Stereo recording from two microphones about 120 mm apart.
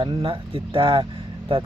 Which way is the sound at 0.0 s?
45° right (ahead or behind).